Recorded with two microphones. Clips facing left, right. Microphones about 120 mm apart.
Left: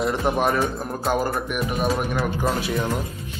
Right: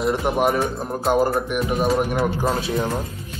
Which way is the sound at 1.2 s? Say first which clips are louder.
Right 4 dB; 25° right (ahead or behind).